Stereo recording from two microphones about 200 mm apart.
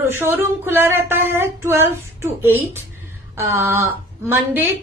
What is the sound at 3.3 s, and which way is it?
Speech, 15° right (ahead or behind).